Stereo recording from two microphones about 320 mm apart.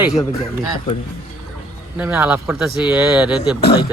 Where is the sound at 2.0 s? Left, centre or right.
Centre.